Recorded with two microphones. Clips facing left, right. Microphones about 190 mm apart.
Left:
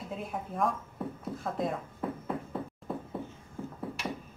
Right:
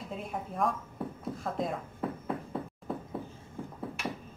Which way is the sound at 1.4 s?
Centre (ahead or behind).